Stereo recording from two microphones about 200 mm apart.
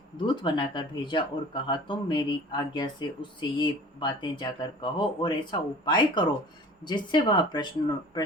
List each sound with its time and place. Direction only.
0.3 s speech: 25° left (ahead or behind)